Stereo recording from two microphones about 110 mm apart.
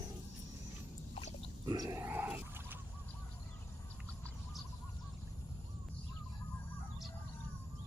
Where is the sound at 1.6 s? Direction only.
35° right (ahead or behind).